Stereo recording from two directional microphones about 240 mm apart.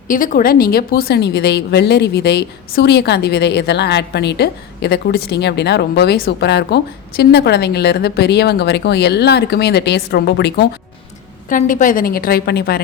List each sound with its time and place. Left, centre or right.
0.1 s a woman's voice: left
11.4 s a woman's voice: left